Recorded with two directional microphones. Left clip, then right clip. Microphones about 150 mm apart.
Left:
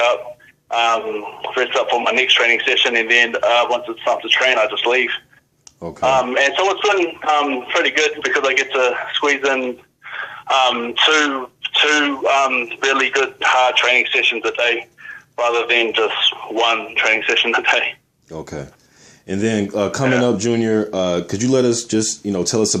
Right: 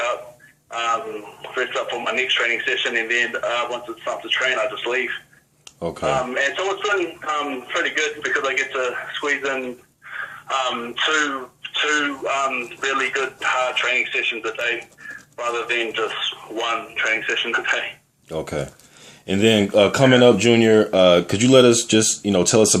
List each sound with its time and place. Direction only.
0.7 s speech: 30° left (ahead or behind)
18.3 s speech: 10° left (ahead or behind)